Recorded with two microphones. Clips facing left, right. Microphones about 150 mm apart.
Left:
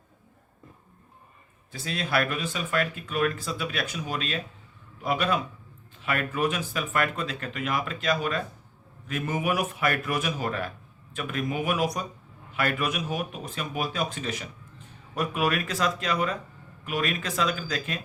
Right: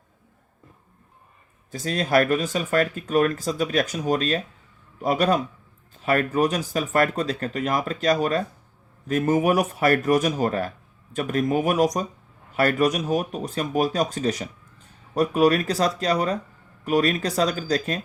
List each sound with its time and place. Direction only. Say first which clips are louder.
1.7 s a man's voice: right 7 dB; 40° right (ahead or behind)